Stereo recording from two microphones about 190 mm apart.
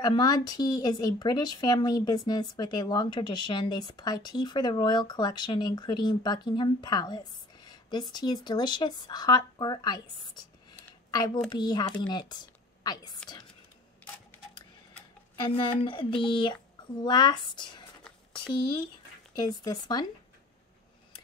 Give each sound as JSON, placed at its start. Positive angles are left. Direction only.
{"t": 0.0, "sound": "speech", "side_deg": 20}
{"t": 15.4, "sound": "speech", "side_deg": 25}